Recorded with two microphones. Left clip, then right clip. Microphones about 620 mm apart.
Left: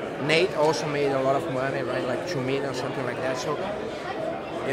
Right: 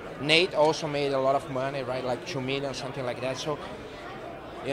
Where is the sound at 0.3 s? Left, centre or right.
Right.